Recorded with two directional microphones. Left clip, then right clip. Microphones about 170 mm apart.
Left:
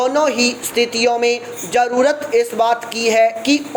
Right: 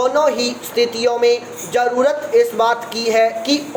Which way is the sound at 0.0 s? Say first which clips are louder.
Even; 35° left (ahead or behind).